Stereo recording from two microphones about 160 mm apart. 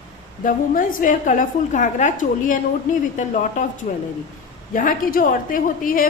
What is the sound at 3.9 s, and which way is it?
A woman's voice, 50° left (ahead or behind).